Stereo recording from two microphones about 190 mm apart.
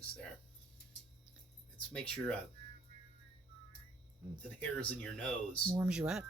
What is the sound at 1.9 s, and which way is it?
Speech, 5° left (ahead or behind).